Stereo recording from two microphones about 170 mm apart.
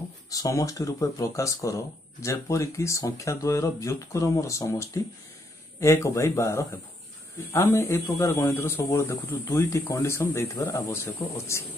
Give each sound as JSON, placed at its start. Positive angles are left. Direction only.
{"t": 0.3, "sound": "speech", "side_deg": 20}